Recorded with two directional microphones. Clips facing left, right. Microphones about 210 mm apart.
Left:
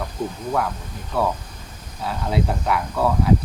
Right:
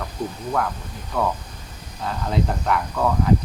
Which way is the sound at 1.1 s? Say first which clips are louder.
Left 1 dB; 5° left (ahead or behind).